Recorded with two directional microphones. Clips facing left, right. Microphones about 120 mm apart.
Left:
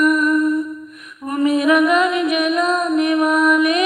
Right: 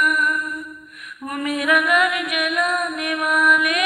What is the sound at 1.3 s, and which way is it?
Music, 25° left (ahead or behind).